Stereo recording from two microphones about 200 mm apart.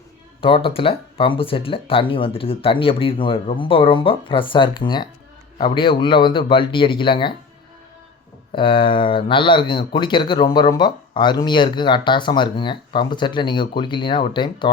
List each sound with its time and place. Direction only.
0.4 s speech: 25° left (ahead or behind)
8.5 s speech: 25° left (ahead or behind)